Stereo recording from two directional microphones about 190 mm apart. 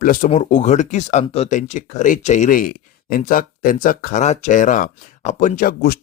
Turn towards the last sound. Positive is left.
turn(degrees=50)  # may be behind; listen again after turning